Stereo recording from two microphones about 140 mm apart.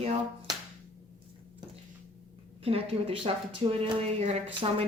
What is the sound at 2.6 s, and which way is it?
Speech, 45° right (ahead or behind).